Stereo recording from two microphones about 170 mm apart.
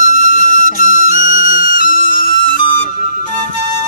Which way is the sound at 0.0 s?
50° left (ahead or behind).